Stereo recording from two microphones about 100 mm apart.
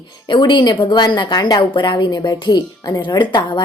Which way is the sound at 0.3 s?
50° left (ahead or behind).